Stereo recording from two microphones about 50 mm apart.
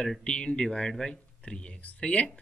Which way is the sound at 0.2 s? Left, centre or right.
Centre.